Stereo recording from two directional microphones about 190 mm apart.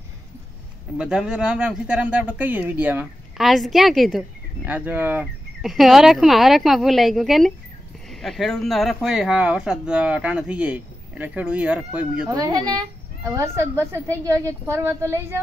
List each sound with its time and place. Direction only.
0.9 s speech: 5° right (ahead or behind)
12.3 s a woman's voice: 20° right (ahead or behind)